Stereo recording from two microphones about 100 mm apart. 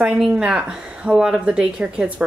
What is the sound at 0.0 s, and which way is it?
Speech, 10° right (ahead or behind).